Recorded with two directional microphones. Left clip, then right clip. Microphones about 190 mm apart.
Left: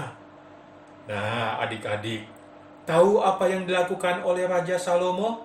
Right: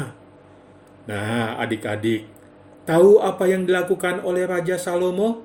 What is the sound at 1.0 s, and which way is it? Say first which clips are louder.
A man's voice: right 2 dB; 60° right (ahead or behind).